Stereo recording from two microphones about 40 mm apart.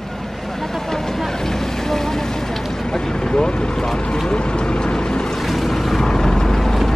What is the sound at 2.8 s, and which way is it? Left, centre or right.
Vehicle, centre.